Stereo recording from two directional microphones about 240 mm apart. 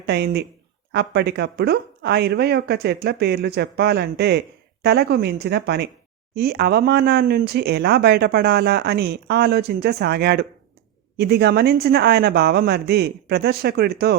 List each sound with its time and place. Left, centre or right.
0.0 s speech: right